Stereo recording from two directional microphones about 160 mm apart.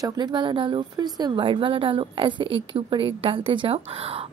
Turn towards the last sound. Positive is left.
turn(degrees=-35)  # may be behind; listen again after turning